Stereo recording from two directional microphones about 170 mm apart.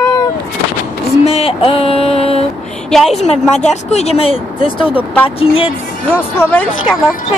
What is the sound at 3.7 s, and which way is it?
Speech, 40° left (ahead or behind).